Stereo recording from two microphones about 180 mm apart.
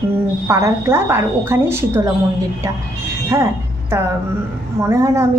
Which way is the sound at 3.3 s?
15° right (ahead or behind).